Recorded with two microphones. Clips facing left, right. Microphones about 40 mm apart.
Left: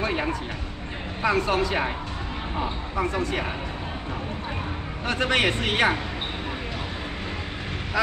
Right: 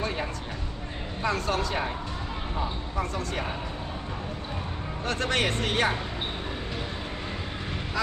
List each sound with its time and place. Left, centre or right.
0.0 s a sound: left
1.2 s a man's voice: centre
3.0 s a man's voice: centre
5.0 s a man's voice: centre